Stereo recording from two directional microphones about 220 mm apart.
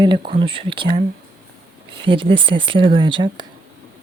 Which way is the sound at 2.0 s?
25° right (ahead or behind).